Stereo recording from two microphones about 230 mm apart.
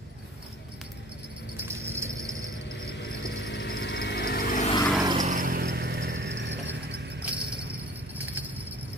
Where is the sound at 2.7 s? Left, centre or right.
Left.